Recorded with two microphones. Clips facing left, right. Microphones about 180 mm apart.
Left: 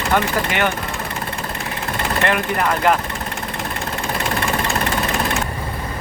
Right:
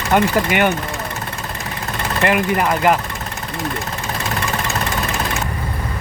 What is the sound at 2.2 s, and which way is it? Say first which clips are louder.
Speech: right 4 dB; 10° right (ahead or behind).